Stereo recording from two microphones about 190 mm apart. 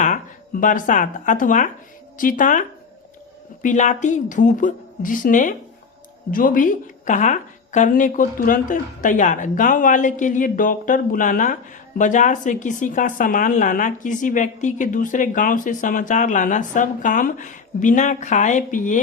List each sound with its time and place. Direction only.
0.0 s a woman's voice: 45° left (ahead or behind)